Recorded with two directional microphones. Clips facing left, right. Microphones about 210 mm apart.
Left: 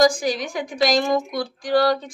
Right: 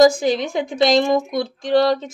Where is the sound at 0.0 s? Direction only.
25° right (ahead or behind).